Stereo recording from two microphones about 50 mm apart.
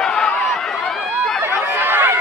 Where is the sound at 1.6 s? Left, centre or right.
Right.